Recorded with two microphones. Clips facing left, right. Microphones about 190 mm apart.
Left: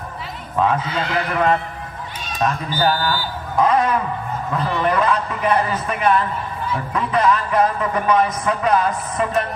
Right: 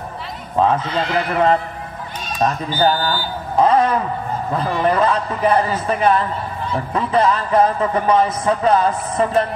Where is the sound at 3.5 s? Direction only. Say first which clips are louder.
Right 2 dB; 30° right (ahead or behind).